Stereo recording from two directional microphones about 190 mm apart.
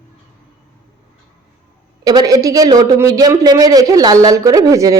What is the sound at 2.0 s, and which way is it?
A man's voice, 20° right (ahead or behind).